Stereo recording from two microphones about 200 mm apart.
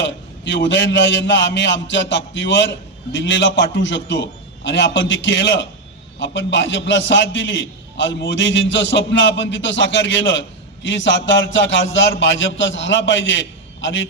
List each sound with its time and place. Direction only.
0.0 s a man's voice: 65° left (ahead or behind)